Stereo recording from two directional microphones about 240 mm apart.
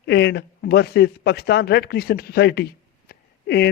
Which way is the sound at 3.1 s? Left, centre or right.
Left.